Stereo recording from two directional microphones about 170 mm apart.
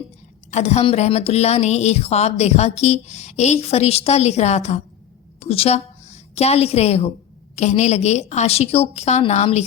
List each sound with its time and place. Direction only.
0.5 s a woman's voice: 40° left (ahead or behind)